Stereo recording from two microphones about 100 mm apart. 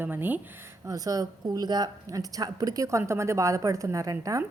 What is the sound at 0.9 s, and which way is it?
A woman's voice, 35° right (ahead or behind).